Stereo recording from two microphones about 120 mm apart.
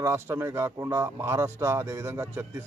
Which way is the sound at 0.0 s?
20° right (ahead or behind).